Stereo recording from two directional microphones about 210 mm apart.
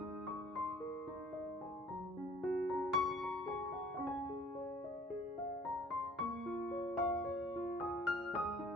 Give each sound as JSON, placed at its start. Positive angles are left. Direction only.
{"t": 2.4, "sound": "music", "side_deg": 0}
{"t": 6.1, "sound": "music", "side_deg": 0}